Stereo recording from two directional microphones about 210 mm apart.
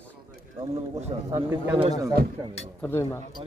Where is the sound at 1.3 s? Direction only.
10° right (ahead or behind).